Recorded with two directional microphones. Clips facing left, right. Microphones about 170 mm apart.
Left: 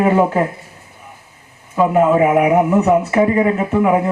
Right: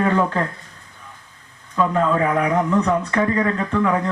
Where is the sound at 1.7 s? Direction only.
20° left (ahead or behind).